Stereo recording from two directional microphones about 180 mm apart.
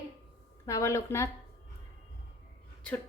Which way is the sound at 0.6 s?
15° left (ahead or behind).